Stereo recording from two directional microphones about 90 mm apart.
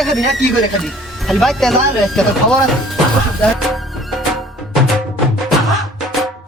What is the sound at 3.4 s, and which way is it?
Music, 10° left (ahead or behind).